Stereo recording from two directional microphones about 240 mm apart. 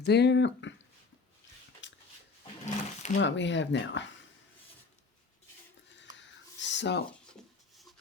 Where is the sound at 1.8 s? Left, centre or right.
Left.